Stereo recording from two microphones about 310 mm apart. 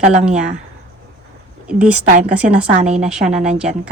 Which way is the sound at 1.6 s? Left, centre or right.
Centre.